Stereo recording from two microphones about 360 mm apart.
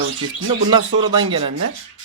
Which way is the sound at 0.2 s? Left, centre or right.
Right.